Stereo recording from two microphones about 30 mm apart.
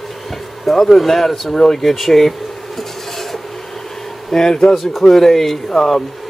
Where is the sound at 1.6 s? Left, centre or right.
Centre.